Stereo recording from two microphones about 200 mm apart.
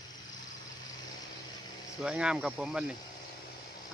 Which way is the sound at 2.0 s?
5° right (ahead or behind).